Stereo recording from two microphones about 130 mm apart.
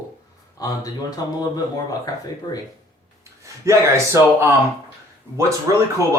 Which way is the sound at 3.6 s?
20° right (ahead or behind).